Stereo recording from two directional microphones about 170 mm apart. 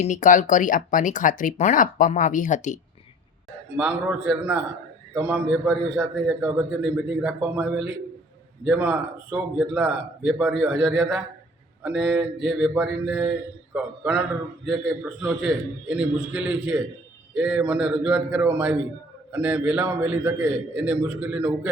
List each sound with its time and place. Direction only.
0.0 s speech: 50° left (ahead or behind)
3.8 s speech: 5° right (ahead or behind)